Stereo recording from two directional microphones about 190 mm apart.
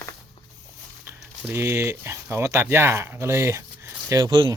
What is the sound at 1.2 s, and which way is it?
Speech, 10° right (ahead or behind).